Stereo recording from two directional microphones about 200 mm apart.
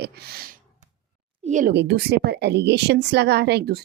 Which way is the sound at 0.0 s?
50° right (ahead or behind).